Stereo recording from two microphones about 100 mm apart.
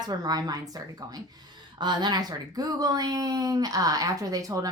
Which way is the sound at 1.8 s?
45° right (ahead or behind).